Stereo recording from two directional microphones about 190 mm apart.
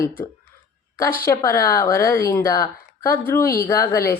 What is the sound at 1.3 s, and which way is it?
A woman's voice, 15° left (ahead or behind).